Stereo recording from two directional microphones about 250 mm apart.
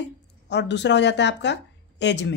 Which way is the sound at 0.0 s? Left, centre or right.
Left.